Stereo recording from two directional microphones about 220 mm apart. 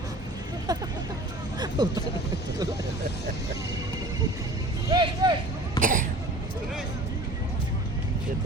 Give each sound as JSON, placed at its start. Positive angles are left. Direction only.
{"t": 0.7, "sound": "speech", "side_deg": -15}
{"t": 1.5, "sound": "vehicle", "side_deg": -20}
{"t": 4.9, "sound": "vehicle", "side_deg": -20}
{"t": 5.8, "sound": "cough", "side_deg": -40}